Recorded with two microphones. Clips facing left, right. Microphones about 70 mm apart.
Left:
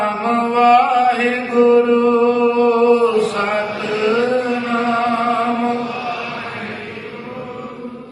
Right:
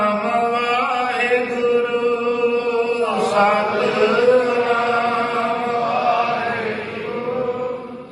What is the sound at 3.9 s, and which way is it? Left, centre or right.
Chant, right.